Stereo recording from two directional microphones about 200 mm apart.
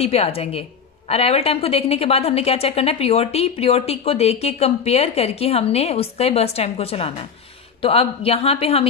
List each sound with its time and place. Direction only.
0.0 s a woman's voice: 30° left (ahead or behind)